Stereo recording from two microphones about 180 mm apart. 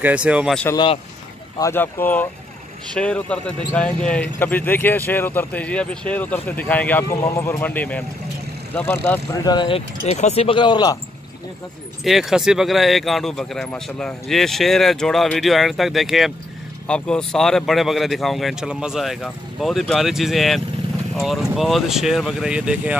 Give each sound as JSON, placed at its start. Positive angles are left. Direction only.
{"t": 0.0, "sound": "speech", "side_deg": -5}
{"t": 1.6, "sound": "speech", "side_deg": 10}
{"t": 12.0, "sound": "speech", "side_deg": 0}